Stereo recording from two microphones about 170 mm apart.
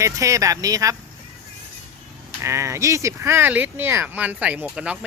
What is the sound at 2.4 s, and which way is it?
Speech, 15° right (ahead or behind).